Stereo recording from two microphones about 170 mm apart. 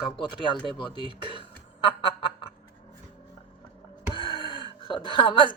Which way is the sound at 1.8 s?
30° left (ahead or behind).